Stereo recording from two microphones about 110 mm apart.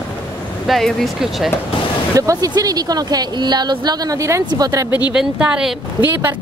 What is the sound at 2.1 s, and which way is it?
Speech, 30° right (ahead or behind).